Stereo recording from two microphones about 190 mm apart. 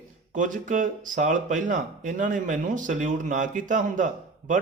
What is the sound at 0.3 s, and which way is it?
Speech, 45° right (ahead or behind).